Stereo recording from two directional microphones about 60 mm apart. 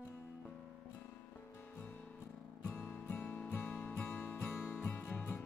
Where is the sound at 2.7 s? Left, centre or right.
Left.